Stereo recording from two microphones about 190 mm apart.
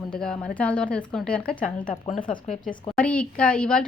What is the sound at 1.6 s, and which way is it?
Speech, 40° left (ahead or behind).